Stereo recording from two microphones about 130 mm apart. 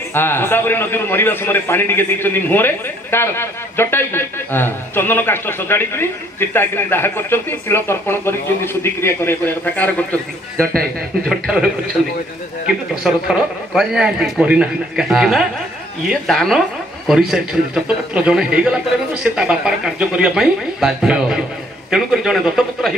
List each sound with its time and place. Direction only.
0.1 s a man's voice: 15° left (ahead or behind)
11.2 s a man's voice: 5° right (ahead or behind)
13.0 s a man's voice: 5° right (ahead or behind)